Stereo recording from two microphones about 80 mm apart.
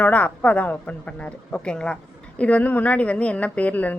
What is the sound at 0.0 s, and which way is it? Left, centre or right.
A woman's voice, centre.